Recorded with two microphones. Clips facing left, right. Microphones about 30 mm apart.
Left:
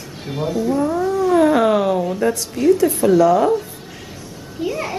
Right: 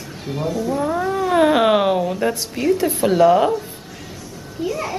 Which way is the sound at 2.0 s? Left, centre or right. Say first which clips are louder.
Left 1 dB; centre.